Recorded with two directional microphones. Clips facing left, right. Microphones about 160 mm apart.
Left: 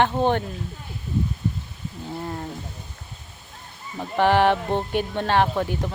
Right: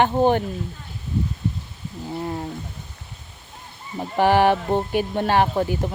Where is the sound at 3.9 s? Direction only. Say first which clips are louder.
Right 1 dB; 10° right (ahead or behind).